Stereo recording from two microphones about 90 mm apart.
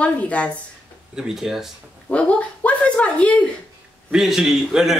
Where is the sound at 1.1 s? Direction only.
5° right (ahead or behind).